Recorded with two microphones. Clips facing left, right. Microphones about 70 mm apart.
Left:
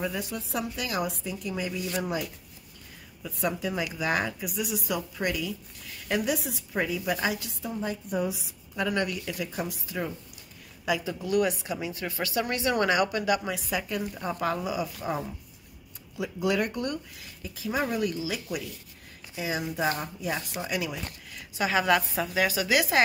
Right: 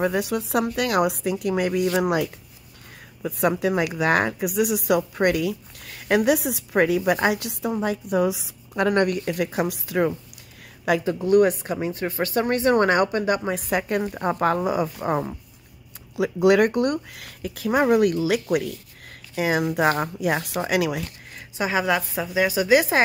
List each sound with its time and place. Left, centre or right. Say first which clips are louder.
0.0 s speech: right 9 dB; right
3.2 s speech: right 8 dB; right
8.8 s speech: right 8 dB; right
10.9 s speech: right 8 dB; right
13.5 s a woman's voice: right 7 dB; right
16.2 s speech: right 10 dB; right
21.5 s a woman's voice: right 2 dB; centre